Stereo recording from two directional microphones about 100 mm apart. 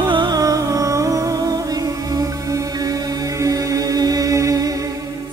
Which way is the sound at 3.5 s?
40° right (ahead or behind).